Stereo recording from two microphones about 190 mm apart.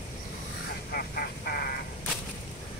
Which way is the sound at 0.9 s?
50° left (ahead or behind).